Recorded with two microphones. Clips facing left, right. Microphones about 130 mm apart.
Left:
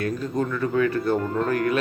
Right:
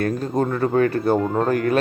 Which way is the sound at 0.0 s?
40° right (ahead or behind).